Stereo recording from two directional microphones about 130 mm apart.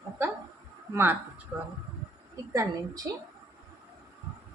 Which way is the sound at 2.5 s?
25° right (ahead or behind).